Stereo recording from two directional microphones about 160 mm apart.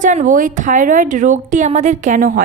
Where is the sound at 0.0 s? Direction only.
50° right (ahead or behind).